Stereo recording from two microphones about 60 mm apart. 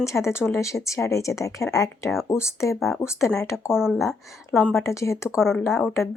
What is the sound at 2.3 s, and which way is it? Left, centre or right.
Speech, left.